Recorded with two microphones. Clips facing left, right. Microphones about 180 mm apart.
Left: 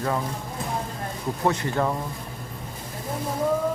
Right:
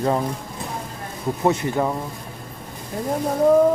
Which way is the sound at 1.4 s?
20° right (ahead or behind).